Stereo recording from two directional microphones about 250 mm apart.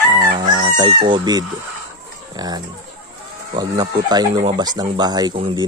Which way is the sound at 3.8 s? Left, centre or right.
Centre.